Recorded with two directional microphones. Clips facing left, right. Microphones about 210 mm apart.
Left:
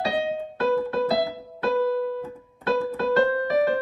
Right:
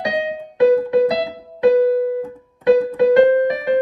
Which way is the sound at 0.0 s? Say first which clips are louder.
Right 3 dB; 15° right (ahead or behind).